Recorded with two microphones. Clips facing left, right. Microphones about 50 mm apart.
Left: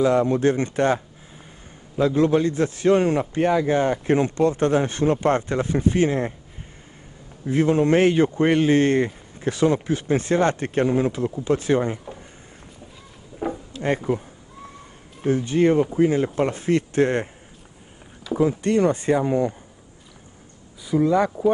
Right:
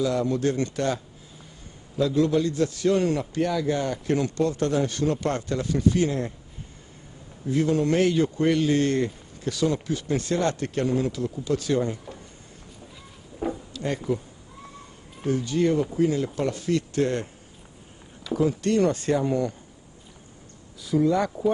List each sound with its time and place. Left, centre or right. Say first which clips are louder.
0.0 s a man's voice: left 6 dB; left
7.4 s a man's voice: left 4 dB; left
13.4 s a sound: left 2 dB; left
15.2 s a man's voice: left 4 dB; left
18.3 s a man's voice: left 3 dB; left
20.8 s speech: left 3 dB; centre